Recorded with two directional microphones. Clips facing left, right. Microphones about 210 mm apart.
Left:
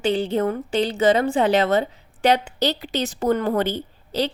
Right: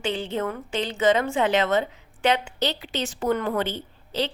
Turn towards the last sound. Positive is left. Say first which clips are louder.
# left 4 dB
turn(degrees=40)  # may be behind; listen again after turning